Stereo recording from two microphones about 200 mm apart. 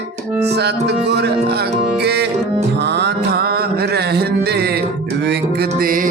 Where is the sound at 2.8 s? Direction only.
55° right (ahead or behind).